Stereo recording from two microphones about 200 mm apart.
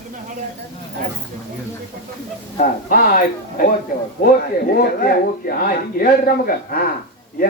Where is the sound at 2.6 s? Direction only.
45° left (ahead or behind).